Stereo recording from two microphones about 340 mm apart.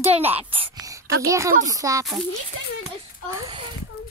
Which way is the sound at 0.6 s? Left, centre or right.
Centre.